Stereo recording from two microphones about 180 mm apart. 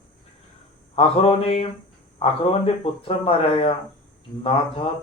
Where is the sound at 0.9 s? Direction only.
35° left (ahead or behind).